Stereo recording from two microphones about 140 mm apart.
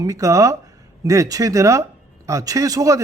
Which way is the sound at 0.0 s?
25° right (ahead or behind).